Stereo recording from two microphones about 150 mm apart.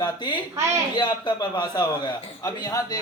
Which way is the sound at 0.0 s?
30° left (ahead or behind).